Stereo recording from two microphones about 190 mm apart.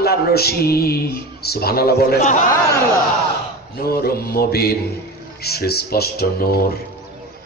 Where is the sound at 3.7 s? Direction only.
55° left (ahead or behind).